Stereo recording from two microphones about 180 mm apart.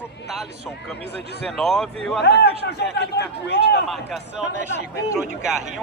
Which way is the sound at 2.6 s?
70° left (ahead or behind).